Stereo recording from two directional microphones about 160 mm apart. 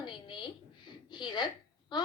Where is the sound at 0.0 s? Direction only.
30° left (ahead or behind).